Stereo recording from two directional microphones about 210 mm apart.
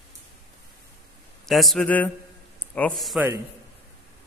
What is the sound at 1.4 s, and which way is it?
Speech, centre (ahead or behind).